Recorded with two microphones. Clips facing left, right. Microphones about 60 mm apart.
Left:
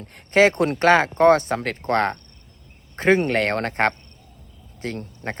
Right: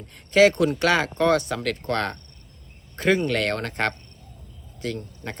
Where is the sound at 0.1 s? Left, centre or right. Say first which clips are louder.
Even; left.